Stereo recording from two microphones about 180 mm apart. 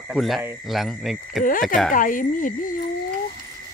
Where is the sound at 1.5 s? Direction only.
50° left (ahead or behind).